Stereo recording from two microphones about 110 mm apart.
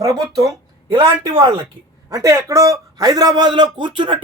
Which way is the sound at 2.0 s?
30° right (ahead or behind).